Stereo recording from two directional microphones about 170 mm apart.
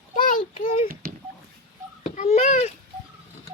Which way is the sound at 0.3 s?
50° left (ahead or behind).